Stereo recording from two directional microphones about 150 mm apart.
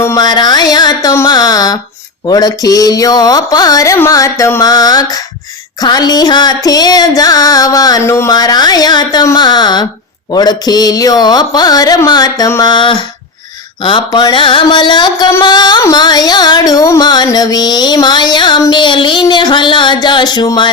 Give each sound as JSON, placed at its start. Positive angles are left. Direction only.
{"t": 0.0, "sound": "music", "side_deg": 25}
{"t": 13.8, "sound": "mantra", "side_deg": 30}
{"t": 15.4, "sound": "music", "side_deg": 30}